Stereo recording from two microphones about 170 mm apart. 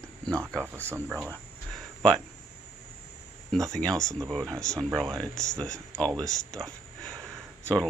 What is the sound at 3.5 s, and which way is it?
Speech, 5° left (ahead or behind).